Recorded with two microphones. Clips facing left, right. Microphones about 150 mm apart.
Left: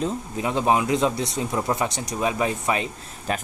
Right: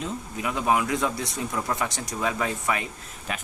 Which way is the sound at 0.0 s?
30° left (ahead or behind).